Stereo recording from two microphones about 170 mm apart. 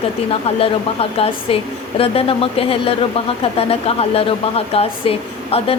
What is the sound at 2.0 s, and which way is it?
A woman's voice, 35° left (ahead or behind).